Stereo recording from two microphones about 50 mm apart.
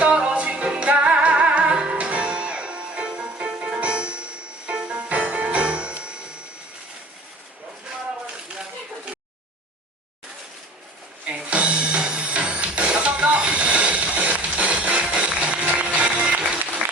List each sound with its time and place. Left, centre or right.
0.0 s music: right
11.3 s music: right